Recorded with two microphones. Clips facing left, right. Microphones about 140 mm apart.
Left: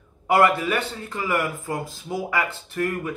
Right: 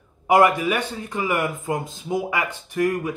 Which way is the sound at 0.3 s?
15° right (ahead or behind).